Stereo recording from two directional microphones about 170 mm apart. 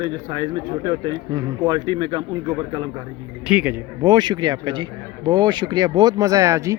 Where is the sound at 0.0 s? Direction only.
25° right (ahead or behind).